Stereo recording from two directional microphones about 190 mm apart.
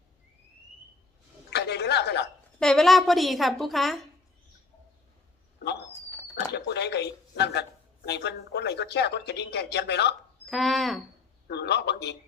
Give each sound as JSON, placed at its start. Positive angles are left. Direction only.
{"t": 1.5, "sound": "a sound", "side_deg": 60}
{"t": 2.6, "sound": "speech", "side_deg": 0}
{"t": 6.5, "sound": "speech", "side_deg": 60}
{"t": 10.4, "sound": "speech", "side_deg": 0}
{"t": 11.4, "sound": "speech", "side_deg": 60}